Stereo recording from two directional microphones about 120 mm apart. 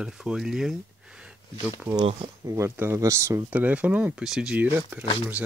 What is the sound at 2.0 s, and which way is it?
Speech, 60° right (ahead or behind).